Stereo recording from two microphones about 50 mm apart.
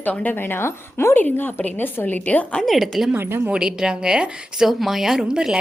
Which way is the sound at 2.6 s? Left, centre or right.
Centre.